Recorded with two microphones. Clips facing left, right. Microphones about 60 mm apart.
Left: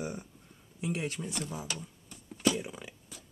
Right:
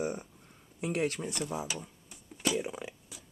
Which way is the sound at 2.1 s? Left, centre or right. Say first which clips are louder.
Left 3 dB; centre.